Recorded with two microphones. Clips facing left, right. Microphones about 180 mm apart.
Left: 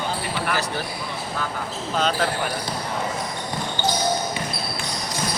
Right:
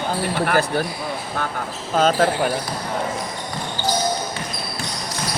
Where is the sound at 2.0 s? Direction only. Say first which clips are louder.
Right 6 dB; 45° right (ahead or behind).